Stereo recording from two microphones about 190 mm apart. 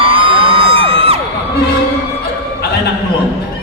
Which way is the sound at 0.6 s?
75° left (ahead or behind).